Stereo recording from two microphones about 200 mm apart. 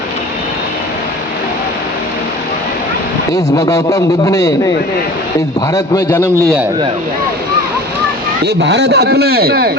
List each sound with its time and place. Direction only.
3.5 s a man's voice: 15° left (ahead or behind)
5.7 s a man's voice: 15° left (ahead or behind)
6.3 s a man's voice: 15° right (ahead or behind)
8.4 s a man's voice: 60° right (ahead or behind)